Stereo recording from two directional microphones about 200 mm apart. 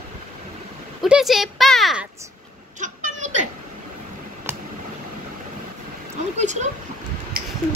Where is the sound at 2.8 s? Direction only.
35° right (ahead or behind).